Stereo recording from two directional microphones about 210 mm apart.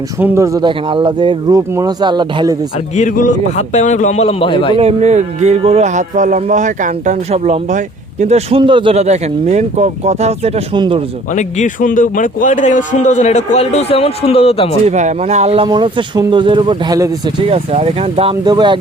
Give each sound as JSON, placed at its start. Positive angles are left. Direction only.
{"t": 0.2, "sound": "speech", "side_deg": -10}
{"t": 2.9, "sound": "a man's voice", "side_deg": 35}
{"t": 4.8, "sound": "speech", "side_deg": -30}
{"t": 11.3, "sound": "a man's voice", "side_deg": 35}
{"t": 14.8, "sound": "speech", "side_deg": -35}
{"t": 17.5, "sound": "speech", "side_deg": -30}